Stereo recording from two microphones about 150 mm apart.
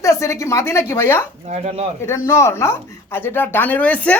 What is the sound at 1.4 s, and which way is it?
Speech, 50° right (ahead or behind).